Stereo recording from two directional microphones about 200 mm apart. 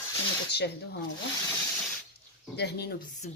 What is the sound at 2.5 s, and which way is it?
Speech, 55° left (ahead or behind).